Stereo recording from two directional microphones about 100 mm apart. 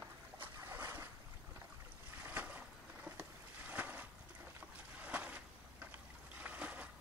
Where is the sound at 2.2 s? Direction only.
15° right (ahead or behind).